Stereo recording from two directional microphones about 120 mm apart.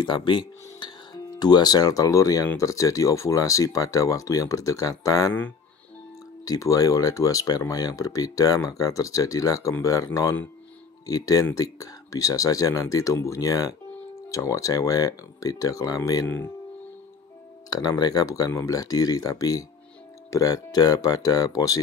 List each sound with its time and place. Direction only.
0.0 s speech: 40° left (ahead or behind)
6.4 s speech: 30° left (ahead or behind)
16.3 s speech: 15° left (ahead or behind)
17.6 s speech: 30° left (ahead or behind)